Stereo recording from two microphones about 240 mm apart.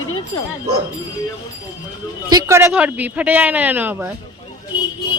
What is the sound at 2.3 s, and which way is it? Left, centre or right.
Speech, centre.